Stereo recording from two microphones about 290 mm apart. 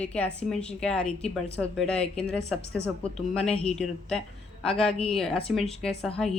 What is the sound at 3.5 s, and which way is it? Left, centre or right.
Speech, left.